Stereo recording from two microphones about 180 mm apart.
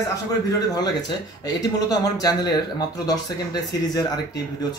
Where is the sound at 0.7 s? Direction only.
20° left (ahead or behind).